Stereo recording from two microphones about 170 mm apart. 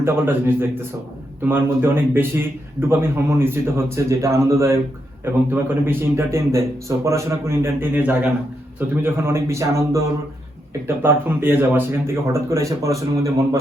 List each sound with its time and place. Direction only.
0.0 s a man's voice: 15° right (ahead or behind)